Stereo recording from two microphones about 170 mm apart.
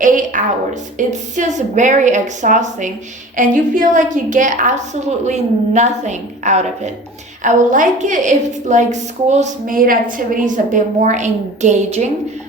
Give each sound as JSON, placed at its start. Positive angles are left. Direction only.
{"t": 0.0, "sound": "a woman's voice", "side_deg": -50}